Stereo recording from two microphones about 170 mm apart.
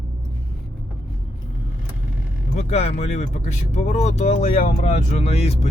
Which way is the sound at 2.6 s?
40° left (ahead or behind).